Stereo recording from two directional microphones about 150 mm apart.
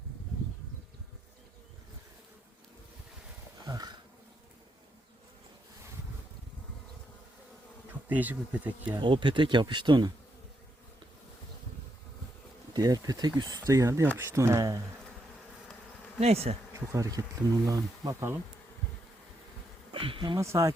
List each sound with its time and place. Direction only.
3.7 s a sound: 25° right (ahead or behind)
8.0 s speech: 10° right (ahead or behind)
9.0 s speech: 35° right (ahead or behind)
12.7 s speech: 25° right (ahead or behind)
16.2 s bee: 45° right (ahead or behind)
16.9 s speech: 25° right (ahead or behind)
19.9 s speech: 35° right (ahead or behind)
20.4 s speech: 20° right (ahead or behind)